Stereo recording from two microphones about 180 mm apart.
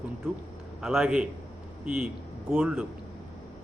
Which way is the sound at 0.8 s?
Centre (ahead or behind).